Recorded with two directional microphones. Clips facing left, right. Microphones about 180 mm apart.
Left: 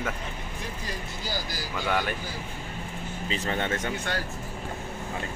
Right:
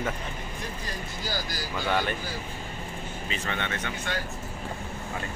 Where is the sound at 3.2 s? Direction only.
35° left (ahead or behind).